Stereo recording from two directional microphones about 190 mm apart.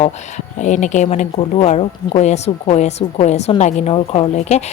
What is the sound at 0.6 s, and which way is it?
Speech, 40° left (ahead or behind).